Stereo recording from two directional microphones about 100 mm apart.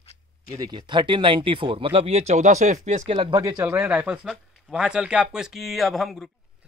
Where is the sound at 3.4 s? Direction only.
35° right (ahead or behind).